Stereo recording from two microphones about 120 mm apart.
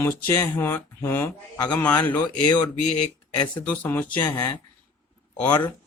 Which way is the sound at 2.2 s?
35° left (ahead or behind).